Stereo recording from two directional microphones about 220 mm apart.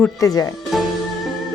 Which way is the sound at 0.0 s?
15° left (ahead or behind).